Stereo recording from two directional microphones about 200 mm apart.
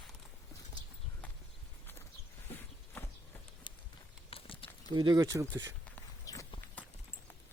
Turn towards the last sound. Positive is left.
turn(degrees=15)  # may be behind; listen again after turning